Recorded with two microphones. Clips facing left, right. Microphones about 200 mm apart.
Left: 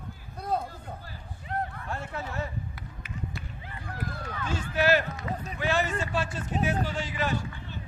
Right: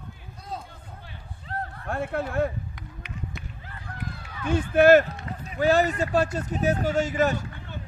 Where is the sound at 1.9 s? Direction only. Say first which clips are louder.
Right 7 dB; 55° right (ahead or behind).